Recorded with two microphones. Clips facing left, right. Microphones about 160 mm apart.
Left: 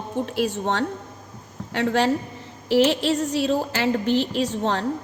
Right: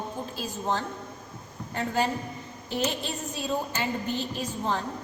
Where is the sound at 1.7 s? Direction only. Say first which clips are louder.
Left 7 dB; 85° left.